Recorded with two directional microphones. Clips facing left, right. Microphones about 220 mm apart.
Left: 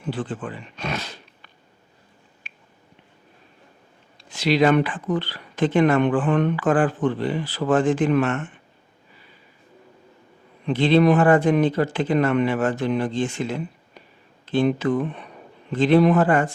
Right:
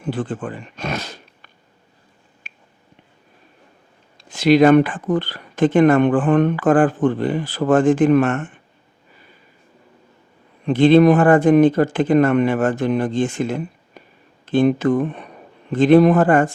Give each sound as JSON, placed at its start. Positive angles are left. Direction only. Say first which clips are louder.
{"t": 0.0, "sound": "speech", "louder": "right 4 dB", "side_deg": -50}
{"t": 2.5, "sound": "a sound", "louder": "right 3 dB", "side_deg": -45}
{"t": 4.2, "sound": "speech", "louder": "right 6 dB", "side_deg": -50}
{"t": 10.7, "sound": "speech", "louder": "right 5 dB", "side_deg": -50}